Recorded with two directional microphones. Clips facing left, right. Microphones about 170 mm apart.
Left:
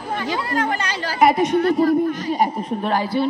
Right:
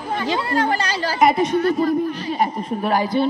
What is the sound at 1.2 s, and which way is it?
Speech, 10° left (ahead or behind).